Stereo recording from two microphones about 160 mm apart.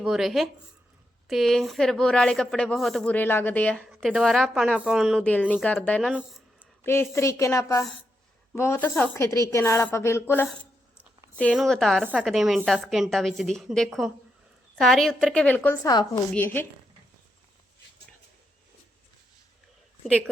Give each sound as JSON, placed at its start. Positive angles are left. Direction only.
{"t": 0.0, "sound": "a woman's voice", "side_deg": 0}
{"t": 3.8, "sound": "a woman's voice", "side_deg": -5}
{"t": 5.2, "sound": "a woman's voice", "side_deg": 10}
{"t": 11.5, "sound": "a woman's voice", "side_deg": 0}
{"t": 15.9, "sound": "speech", "side_deg": 25}
{"t": 16.3, "sound": "a woman's voice", "side_deg": 10}
{"t": 20.1, "sound": "a woman's voice", "side_deg": 5}